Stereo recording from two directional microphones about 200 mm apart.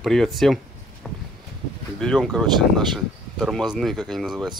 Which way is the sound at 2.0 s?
Centre (ahead or behind).